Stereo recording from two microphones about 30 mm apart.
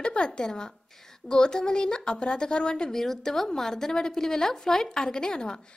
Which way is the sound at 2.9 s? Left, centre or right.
Centre.